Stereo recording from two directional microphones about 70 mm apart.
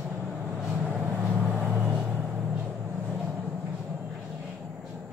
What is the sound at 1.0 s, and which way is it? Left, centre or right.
Vehicle, right.